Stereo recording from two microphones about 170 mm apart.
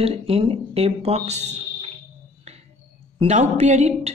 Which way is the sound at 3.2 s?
40° right (ahead or behind).